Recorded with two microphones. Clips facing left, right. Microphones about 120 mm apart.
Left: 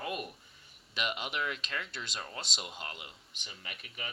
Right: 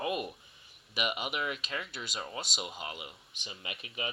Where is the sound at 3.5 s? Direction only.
20° right (ahead or behind).